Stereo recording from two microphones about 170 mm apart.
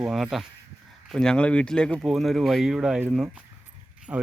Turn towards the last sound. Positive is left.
turn(degrees=-15)  # may be behind; listen again after turning